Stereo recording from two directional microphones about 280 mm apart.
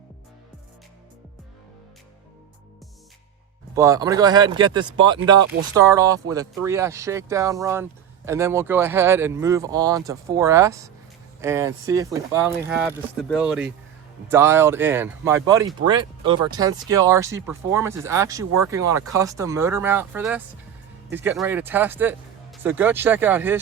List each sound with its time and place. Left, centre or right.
3.8 s speech: centre